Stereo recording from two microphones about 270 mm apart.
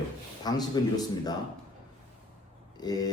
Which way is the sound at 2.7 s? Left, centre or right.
Centre.